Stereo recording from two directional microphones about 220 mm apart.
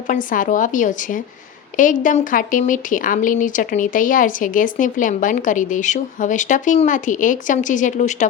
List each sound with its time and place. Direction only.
0.1 s speech: 35° left (ahead or behind)